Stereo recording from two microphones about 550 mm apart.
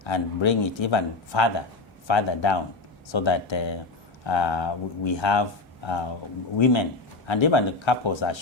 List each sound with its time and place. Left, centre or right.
0.0 s speech: left
7.3 s speech: left